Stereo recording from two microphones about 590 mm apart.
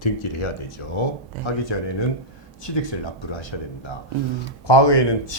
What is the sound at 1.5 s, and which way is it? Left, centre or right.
Speech, left.